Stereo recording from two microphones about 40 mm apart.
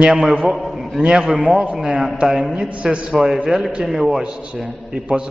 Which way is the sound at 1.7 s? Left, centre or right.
Centre.